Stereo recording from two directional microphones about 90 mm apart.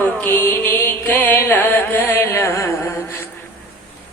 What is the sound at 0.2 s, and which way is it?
Music, 20° left (ahead or behind).